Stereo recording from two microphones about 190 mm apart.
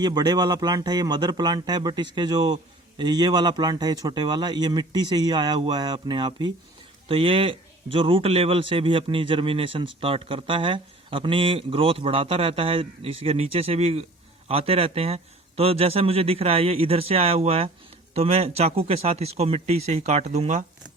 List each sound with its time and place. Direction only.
0.0 s a man's voice: 20° right (ahead or behind); by 20.7 s 40° right (ahead or behind)